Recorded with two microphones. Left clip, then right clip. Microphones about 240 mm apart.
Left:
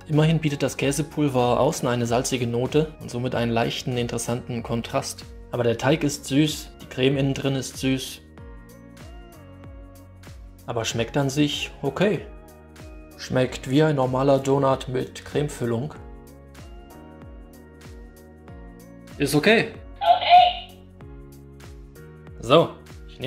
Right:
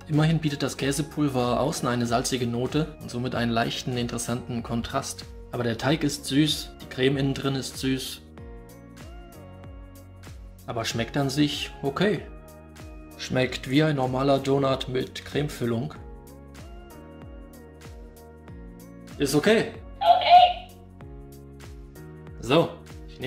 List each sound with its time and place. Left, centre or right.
0.1 s speech: centre
10.7 s speech: centre
13.2 s speech: centre
20.1 s music: right
22.4 s speech: centre